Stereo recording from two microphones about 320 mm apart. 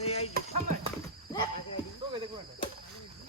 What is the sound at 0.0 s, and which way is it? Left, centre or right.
Clip-clop, centre.